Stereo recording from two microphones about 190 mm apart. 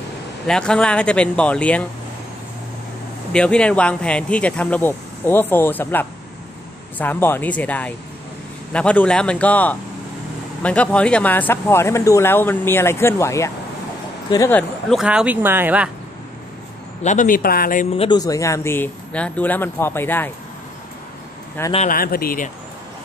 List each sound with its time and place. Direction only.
0.5 s speech: 5° left (ahead or behind)
3.3 s speech: 5° left (ahead or behind)
14.9 s speech: 5° right (ahead or behind)
17.0 s speech: 40° left (ahead or behind)
17.9 s speech: 25° left (ahead or behind)
21.8 s speech: 50° left (ahead or behind)